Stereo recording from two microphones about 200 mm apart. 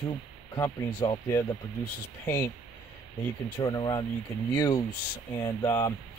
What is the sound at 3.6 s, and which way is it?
Speech, 20° left (ahead or behind).